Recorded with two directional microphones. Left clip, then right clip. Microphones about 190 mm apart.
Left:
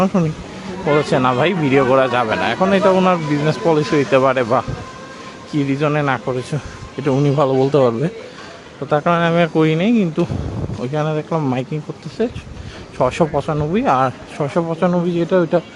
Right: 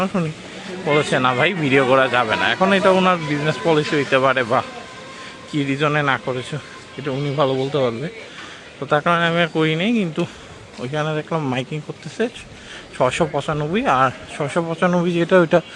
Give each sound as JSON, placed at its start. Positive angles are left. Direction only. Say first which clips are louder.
{"t": 0.0, "sound": "a man's voice", "louder": "left 4 dB", "side_deg": 5}
{"t": 7.0, "sound": "a man's voice", "louder": "left 4 dB", "side_deg": 15}
{"t": 8.9, "sound": "a man's voice", "louder": "left 1 dB", "side_deg": 0}